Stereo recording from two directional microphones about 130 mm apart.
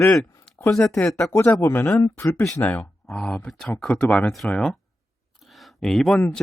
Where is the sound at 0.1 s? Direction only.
5° left (ahead or behind).